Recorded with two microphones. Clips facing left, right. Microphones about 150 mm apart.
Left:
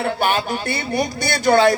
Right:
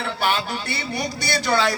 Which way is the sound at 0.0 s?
50° left (ahead or behind).